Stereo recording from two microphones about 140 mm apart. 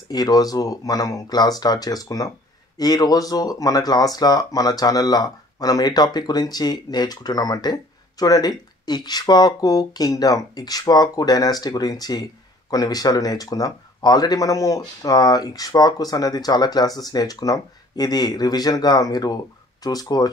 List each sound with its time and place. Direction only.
0.1 s speech: 25° left (ahead or behind)